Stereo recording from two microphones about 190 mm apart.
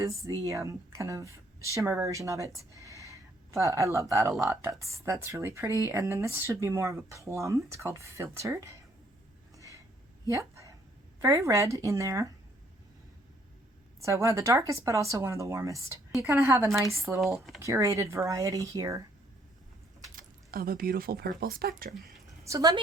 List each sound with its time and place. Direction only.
0.4 s a woman's voice: 15° right (ahead or behind)
9.6 s a sound: 15° right (ahead or behind)
11.2 s speech: 15° right (ahead or behind)
14.0 s speech: 15° right (ahead or behind)
17.3 s speech: centre (ahead or behind)
17.6 s speech: 15° right (ahead or behind)
20.1 s speech: 50° right (ahead or behind)
22.4 s speech: 20° right (ahead or behind)